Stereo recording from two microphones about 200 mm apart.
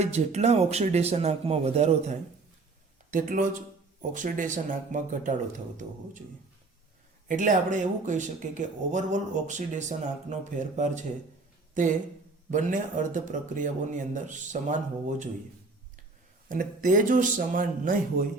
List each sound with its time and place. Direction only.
0.0 s speech: 35° right (ahead or behind)
7.3 s speech: 40° right (ahead or behind)
16.5 s speech: 40° right (ahead or behind)